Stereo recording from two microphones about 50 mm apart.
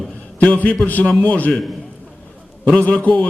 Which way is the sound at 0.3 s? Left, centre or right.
Left.